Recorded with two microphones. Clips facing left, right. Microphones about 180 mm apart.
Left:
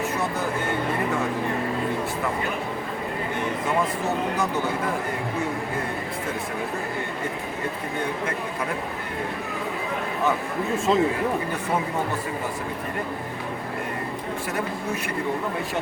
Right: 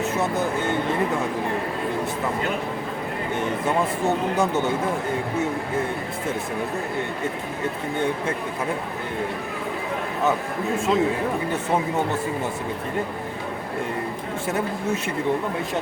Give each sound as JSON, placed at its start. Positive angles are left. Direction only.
{"t": 4.0, "sound": "speech", "side_deg": -25}
{"t": 10.9, "sound": "speech", "side_deg": 0}